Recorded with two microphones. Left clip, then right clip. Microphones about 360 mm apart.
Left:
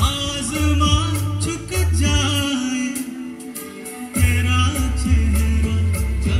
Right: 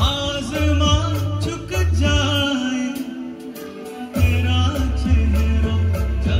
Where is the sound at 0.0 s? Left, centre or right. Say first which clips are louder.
Right 1 dB; right.